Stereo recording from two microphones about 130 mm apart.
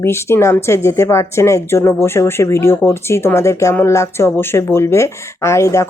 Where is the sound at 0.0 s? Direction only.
20° left (ahead or behind).